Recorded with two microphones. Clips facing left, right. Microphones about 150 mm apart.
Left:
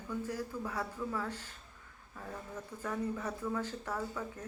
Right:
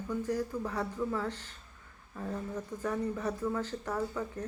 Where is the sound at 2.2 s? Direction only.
15° right (ahead or behind).